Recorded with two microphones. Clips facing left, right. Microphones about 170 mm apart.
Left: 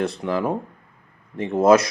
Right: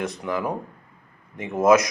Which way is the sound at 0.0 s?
30° left (ahead or behind).